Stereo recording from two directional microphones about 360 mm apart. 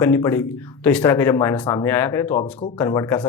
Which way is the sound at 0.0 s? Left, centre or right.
Centre.